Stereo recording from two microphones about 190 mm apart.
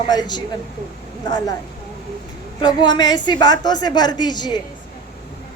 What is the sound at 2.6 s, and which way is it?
A woman's voice, 20° left (ahead or behind).